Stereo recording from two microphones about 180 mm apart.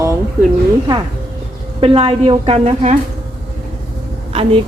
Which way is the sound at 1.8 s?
30° right (ahead or behind).